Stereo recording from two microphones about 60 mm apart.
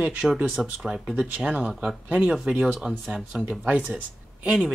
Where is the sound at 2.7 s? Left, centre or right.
Centre.